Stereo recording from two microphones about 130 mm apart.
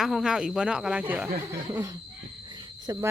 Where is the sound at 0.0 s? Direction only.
Centre (ahead or behind).